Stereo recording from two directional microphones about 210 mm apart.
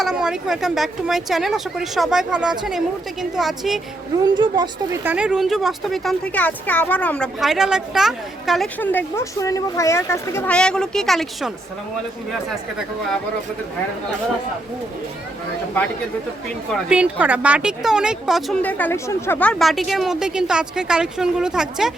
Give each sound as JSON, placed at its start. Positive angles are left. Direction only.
{"t": 0.0, "sound": "speech", "side_deg": 0}
{"t": 4.2, "sound": "a woman's voice", "side_deg": -20}
{"t": 5.0, "sound": "speech", "side_deg": -5}
{"t": 16.9, "sound": "speech", "side_deg": -5}